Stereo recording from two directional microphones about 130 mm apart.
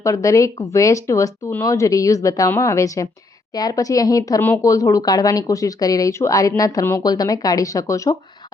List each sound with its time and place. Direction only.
0.0 s speech: 25° left (ahead or behind)